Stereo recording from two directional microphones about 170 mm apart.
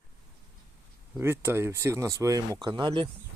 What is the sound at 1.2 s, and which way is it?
Speech, 15° right (ahead or behind).